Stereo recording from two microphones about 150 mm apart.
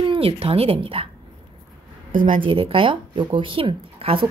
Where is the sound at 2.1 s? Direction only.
65° right (ahead or behind).